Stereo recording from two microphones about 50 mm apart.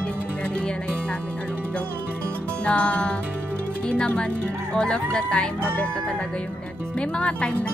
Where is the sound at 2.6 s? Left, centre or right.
Left.